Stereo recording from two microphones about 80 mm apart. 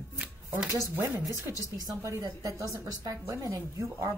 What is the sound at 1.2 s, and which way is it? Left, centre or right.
Speech, right.